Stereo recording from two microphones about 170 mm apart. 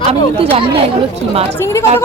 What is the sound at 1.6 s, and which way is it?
Speech, 15° left (ahead or behind).